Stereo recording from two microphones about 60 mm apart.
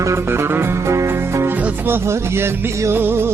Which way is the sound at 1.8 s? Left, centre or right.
Right.